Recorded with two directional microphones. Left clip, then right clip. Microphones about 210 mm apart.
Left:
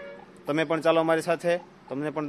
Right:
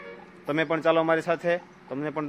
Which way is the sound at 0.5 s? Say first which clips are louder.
Even; 5° left (ahead or behind).